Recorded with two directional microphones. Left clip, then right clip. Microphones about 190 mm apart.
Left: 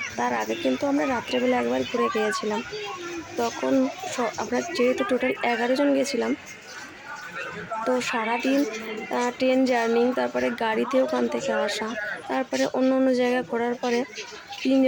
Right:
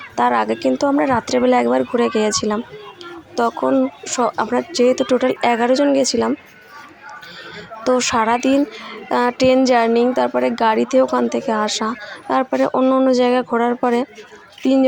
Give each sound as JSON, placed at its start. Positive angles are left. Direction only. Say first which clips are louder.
{"t": 0.2, "sound": "speech", "louder": "right 10 dB", "side_deg": -20}
{"t": 7.9, "sound": "speech", "louder": "right 10 dB", "side_deg": -15}